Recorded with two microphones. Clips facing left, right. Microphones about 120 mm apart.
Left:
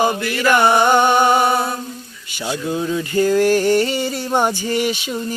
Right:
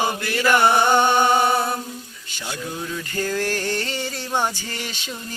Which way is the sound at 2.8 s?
20° left (ahead or behind).